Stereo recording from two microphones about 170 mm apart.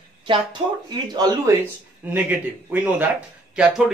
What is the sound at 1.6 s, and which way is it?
Speech, 10° right (ahead or behind).